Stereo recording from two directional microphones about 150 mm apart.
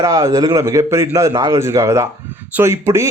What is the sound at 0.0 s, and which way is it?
Speech, 20° right (ahead or behind).